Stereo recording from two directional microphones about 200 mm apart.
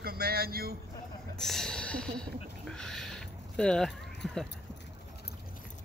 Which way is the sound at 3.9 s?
60° left (ahead or behind).